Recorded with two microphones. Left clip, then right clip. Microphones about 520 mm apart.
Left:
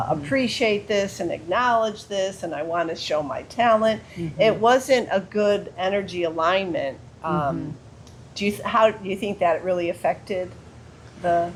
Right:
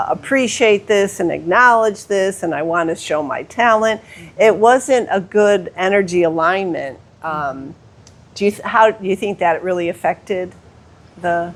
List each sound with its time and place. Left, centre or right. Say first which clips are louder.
0.1 s speech: right 6 dB; right